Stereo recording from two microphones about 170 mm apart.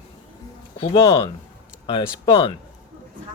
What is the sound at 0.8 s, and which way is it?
Speech, 30° left (ahead or behind).